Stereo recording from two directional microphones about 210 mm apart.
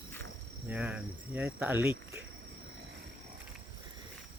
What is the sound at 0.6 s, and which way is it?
Speech, 5° right (ahead or behind).